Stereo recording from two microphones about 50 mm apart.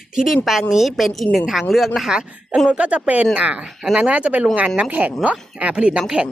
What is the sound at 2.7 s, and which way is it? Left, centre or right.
Speech, right.